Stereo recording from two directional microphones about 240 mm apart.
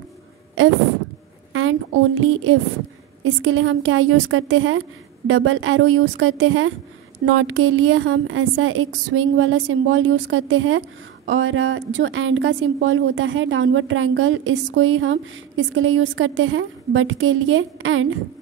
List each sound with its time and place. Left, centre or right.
1.5 s a woman's voice: right